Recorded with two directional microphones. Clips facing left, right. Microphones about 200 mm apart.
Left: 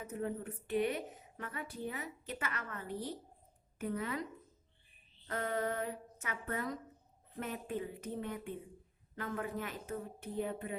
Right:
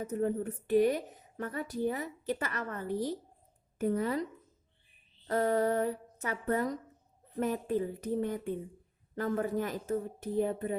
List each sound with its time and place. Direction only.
0.0 s a woman's voice: 40° right (ahead or behind)
5.3 s a woman's voice: 40° right (ahead or behind)